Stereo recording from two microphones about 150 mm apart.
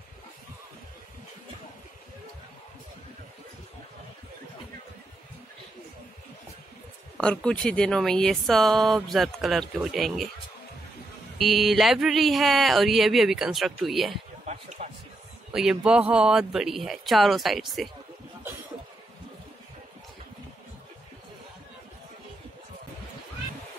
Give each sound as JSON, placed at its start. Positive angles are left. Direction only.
{"t": 7.2, "sound": "speech", "side_deg": 5}
{"t": 11.3, "sound": "speech", "side_deg": 0}
{"t": 14.4, "sound": "a sound", "side_deg": -50}
{"t": 15.5, "sound": "speech", "side_deg": -5}